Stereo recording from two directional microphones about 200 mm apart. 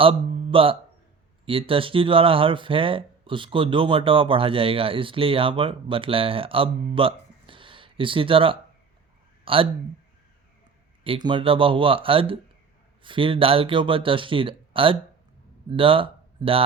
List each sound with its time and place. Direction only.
0.0 s a man's voice: 25° right (ahead or behind)
11.0 s speech: 25° right (ahead or behind)